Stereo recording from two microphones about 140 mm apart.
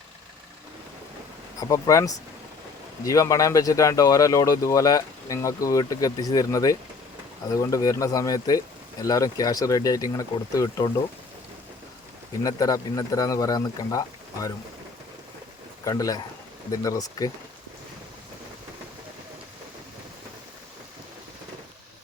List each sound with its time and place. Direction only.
1.5 s speech: 25° left (ahead or behind)
12.4 s speech: 25° left (ahead or behind)
15.8 s speech: 25° left (ahead or behind)